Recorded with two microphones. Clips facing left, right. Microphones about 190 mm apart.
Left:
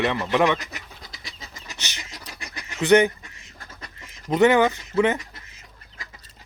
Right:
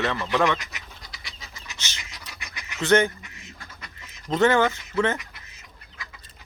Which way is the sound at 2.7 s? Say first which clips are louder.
Left 3 dB; 15° left (ahead or behind).